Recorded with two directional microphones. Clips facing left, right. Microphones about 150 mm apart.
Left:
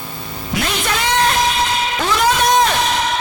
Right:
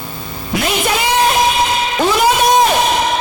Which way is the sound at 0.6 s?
10° right (ahead or behind).